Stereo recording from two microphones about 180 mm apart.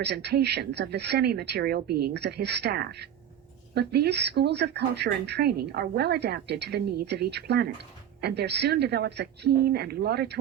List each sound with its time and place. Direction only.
0.0 s speech: 65° right (ahead or behind)